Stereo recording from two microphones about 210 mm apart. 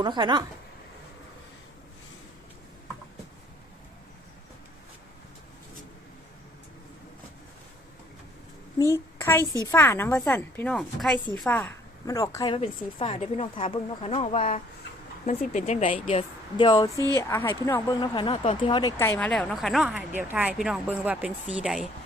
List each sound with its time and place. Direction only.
0.0 s speech: 20° right (ahead or behind)
9.4 s a woman's voice: 15° right (ahead or behind)
9.7 s a woman's voice: 10° left (ahead or behind)
12.5 s speech: 30° left (ahead or behind); by 21.8 s 5° right (ahead or behind)